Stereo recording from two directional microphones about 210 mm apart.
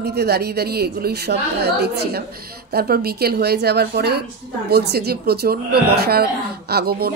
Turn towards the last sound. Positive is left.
turn(degrees=-50)  # may be behind; listen again after turning